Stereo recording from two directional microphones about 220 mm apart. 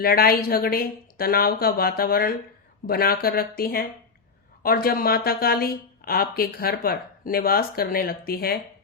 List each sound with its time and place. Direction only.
0.0 s speech: 45° left (ahead or behind)